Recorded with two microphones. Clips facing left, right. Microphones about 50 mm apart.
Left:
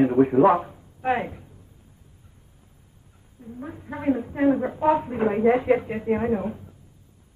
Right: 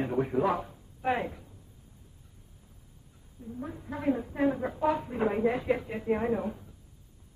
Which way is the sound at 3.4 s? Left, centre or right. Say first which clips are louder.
Left 2 dB; left.